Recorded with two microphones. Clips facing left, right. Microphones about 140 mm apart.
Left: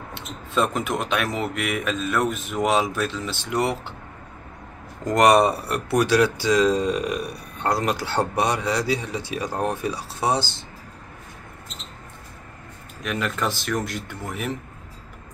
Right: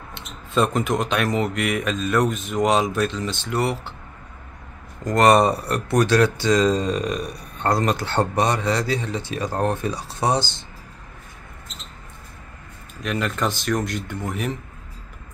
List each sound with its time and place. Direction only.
0.1 s speech: centre (ahead or behind)
3.4 s speech: 20° left (ahead or behind)
5.0 s speech: 15° left (ahead or behind)
13.0 s speech: centre (ahead or behind)